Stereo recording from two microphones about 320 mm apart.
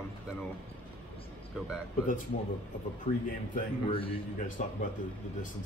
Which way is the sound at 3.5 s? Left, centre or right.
Centre.